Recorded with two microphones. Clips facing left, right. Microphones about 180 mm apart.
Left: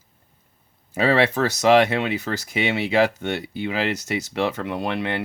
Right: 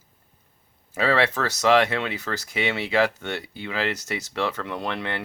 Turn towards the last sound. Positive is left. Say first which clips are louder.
# left 4 dB
turn(degrees=15)  # may be behind; listen again after turning